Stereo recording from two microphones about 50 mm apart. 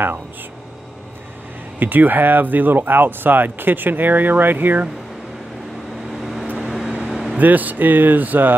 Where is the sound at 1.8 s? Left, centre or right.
Right.